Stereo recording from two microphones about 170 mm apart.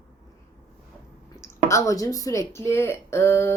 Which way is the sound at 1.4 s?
15° left (ahead or behind).